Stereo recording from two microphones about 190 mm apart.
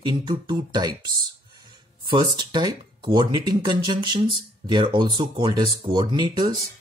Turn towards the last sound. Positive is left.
turn(degrees=-20)  # may be behind; listen again after turning